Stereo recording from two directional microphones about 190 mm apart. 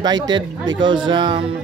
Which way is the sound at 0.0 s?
20° right (ahead or behind).